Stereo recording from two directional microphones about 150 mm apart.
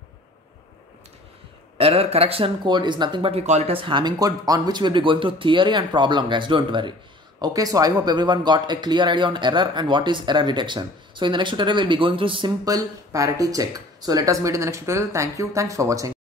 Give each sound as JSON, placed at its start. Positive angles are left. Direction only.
{"t": 1.8, "sound": "speech", "side_deg": -40}